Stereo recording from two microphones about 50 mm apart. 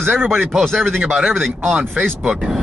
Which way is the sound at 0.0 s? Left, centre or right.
Right.